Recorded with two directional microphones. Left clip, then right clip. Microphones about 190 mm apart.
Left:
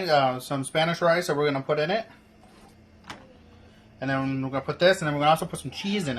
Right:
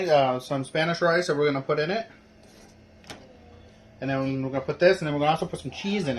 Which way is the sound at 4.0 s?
55° left (ahead or behind).